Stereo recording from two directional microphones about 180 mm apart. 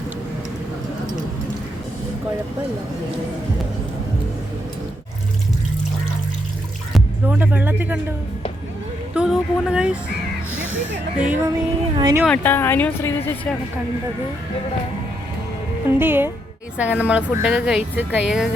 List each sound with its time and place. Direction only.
6.9 s music: 10° right (ahead or behind)
9.1 s speech: 5° right (ahead or behind)
11.2 s speech: 10° right (ahead or behind)
12.2 s speech: 5° left (ahead or behind)
15.9 s speech: 10° right (ahead or behind)